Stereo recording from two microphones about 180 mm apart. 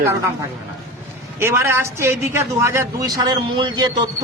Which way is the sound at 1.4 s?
15° right (ahead or behind).